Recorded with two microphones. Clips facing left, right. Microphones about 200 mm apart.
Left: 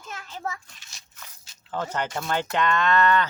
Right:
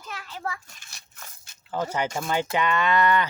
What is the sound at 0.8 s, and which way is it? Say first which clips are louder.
Crushing: right 1 dB; 55° right (ahead or behind).